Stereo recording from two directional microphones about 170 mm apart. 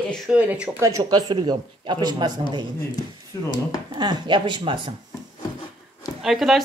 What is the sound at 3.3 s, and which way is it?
Speech, 15° left (ahead or behind).